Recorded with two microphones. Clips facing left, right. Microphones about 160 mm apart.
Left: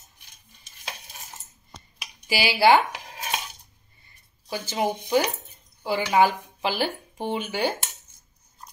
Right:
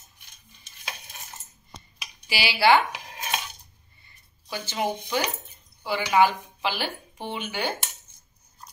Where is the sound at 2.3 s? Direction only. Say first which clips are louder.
Left 2 dB; 45° left (ahead or behind).